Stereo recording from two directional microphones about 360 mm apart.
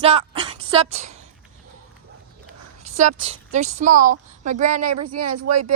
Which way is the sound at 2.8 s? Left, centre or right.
Centre.